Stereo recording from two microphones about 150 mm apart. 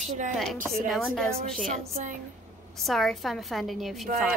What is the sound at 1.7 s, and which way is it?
Speech, 55° right (ahead or behind).